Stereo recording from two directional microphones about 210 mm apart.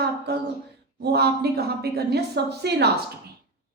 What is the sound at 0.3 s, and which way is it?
A woman's voice, 50° right (ahead or behind).